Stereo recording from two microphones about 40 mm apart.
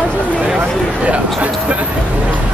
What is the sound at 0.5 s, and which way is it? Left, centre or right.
Speech, right.